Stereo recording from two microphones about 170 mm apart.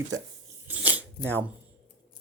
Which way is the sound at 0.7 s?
10° right (ahead or behind).